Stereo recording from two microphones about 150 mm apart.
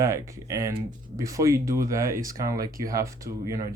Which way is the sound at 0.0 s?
20° right (ahead or behind).